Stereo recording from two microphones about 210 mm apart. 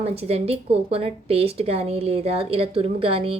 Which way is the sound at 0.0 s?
30° right (ahead or behind).